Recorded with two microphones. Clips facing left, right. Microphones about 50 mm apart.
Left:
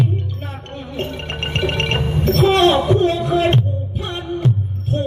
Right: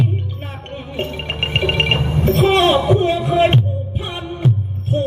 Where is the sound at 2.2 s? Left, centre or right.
Centre.